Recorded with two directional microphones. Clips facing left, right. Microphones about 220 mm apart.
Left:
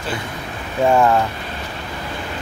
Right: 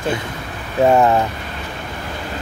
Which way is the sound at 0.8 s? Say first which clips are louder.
Right 2 dB; 20° right (ahead or behind).